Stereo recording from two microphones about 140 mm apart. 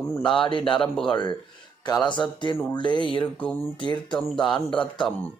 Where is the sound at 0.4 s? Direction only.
35° left (ahead or behind).